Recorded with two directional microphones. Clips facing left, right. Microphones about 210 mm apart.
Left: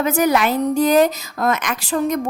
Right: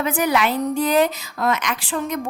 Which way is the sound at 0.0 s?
40° left (ahead or behind).